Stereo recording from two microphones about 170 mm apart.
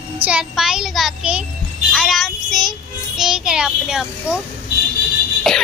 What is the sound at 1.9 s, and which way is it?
Child singing, centre (ahead or behind).